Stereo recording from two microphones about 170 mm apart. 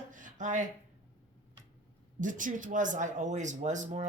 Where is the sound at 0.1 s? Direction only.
50° right (ahead or behind).